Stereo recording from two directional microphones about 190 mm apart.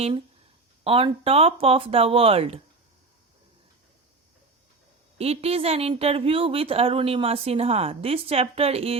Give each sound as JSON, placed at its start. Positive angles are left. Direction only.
{"t": 0.9, "sound": "speech", "side_deg": -30}
{"t": 5.1, "sound": "speech", "side_deg": -35}